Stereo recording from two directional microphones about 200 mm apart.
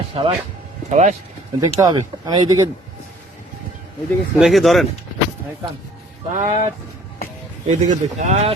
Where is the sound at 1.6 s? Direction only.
20° right (ahead or behind).